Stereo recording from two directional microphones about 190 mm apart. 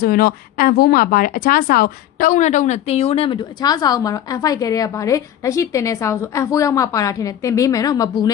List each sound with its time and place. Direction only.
0.0 s a woman's voice: 50° left (ahead or behind); by 8.3 s 20° left (ahead or behind)